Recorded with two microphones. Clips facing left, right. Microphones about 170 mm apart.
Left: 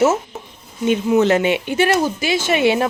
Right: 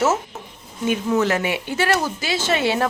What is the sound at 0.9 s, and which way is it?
Speech, 25° left (ahead or behind).